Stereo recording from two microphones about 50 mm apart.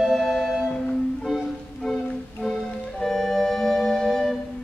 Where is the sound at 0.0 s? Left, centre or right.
Centre.